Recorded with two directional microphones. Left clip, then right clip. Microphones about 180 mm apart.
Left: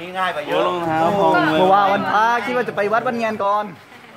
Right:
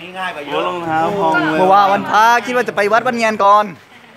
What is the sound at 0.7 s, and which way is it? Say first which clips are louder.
Speech: right 4 dB; 20° right (ahead or behind).